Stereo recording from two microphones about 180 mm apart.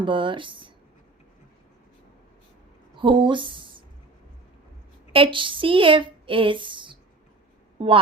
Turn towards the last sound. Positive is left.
turn(degrees=-30)  # may be behind; listen again after turning